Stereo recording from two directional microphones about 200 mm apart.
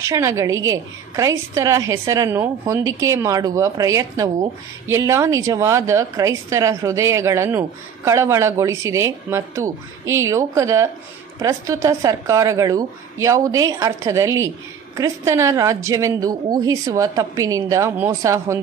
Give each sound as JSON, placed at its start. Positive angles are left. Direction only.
{"t": 0.0, "sound": "a woman's voice", "side_deg": -15}